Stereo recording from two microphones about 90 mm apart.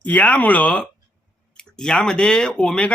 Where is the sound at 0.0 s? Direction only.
15° left (ahead or behind).